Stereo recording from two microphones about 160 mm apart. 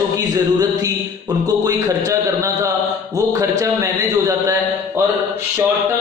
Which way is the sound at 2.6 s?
20° right (ahead or behind).